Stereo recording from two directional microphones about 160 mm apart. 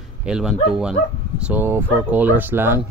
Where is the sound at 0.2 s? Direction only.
5° right (ahead or behind).